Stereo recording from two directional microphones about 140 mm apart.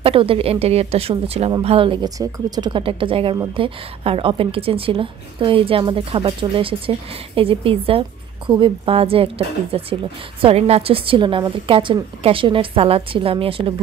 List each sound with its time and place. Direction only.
0.0 s speech: 40° right (ahead or behind)
2.0 s a woman's voice: 25° right (ahead or behind); by 13.7 s 40° right (ahead or behind)